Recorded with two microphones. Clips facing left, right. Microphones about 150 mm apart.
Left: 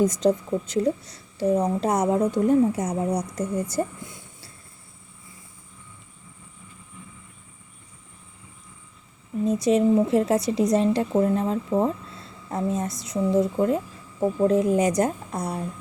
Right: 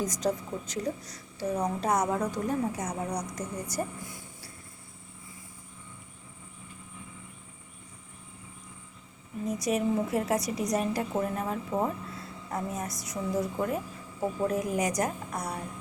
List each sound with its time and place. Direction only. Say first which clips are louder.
0.0 s a woman's voice: left 9 dB; 25° left (ahead or behind)
9.5 s a woman's voice: left 8 dB; 25° left (ahead or behind)